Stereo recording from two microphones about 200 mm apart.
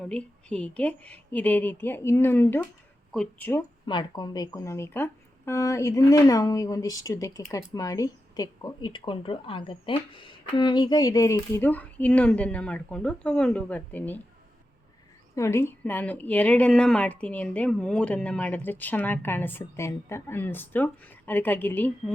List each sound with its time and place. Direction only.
0.0 s speech: 5° left (ahead or behind)
3.8 s speech: 20° left (ahead or behind)
15.4 s speech: 15° left (ahead or behind)